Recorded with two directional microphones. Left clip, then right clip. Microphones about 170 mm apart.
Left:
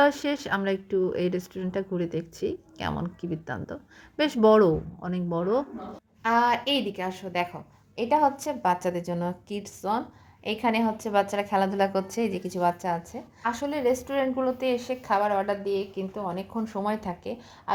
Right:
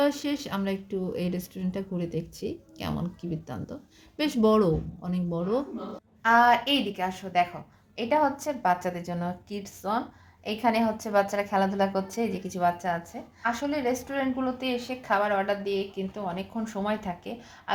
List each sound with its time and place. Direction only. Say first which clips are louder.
0.0 s speech: left 4 dB; 10° left (ahead or behind)
6.2 s a woman's voice: right 3 dB; 30° left (ahead or behind)